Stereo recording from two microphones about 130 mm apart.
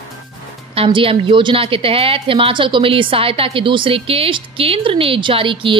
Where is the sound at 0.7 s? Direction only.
45° right (ahead or behind).